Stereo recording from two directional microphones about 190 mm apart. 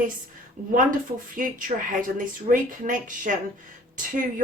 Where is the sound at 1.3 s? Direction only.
45° right (ahead or behind).